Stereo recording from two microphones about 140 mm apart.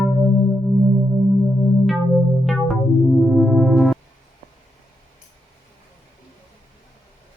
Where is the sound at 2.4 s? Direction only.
Centre (ahead or behind).